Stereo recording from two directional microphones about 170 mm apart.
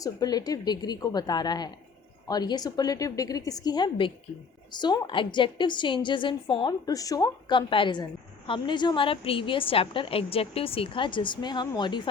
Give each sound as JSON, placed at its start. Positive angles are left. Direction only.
{"t": 0.0, "sound": "a woman's voice", "side_deg": 20}